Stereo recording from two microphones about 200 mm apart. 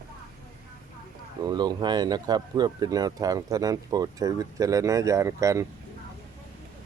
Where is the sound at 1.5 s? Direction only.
20° right (ahead or behind).